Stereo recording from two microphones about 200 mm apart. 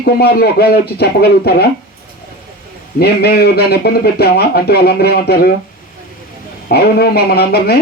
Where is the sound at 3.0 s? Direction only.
50° left (ahead or behind).